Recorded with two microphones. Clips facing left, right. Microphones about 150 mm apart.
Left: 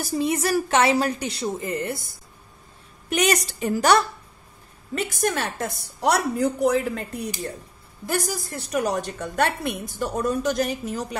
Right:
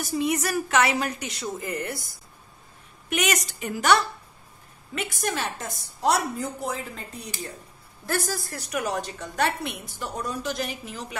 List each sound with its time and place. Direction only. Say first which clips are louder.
0.0 s a woman's voice: left 2 dB; 30° left (ahead or behind)
3.1 s a woman's voice: left 4 dB; 35° left (ahead or behind)
5.2 s a woman's voice: left 4 dB; 55° left (ahead or behind)
8.1 s a woman's voice: left 2 dB; 15° left (ahead or behind)
8.6 s a woman's voice: left 5 dB; 35° left (ahead or behind)
8.9 s a woman's voice: left 4 dB; 50° left (ahead or behind)